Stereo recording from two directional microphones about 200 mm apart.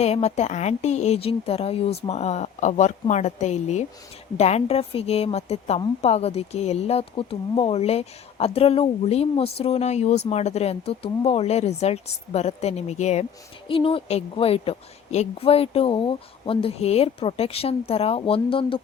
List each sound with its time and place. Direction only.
0.0 s a woman's voice: 30° left (ahead or behind)